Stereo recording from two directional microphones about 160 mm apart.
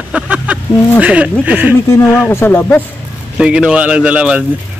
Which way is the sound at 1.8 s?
15° left (ahead or behind).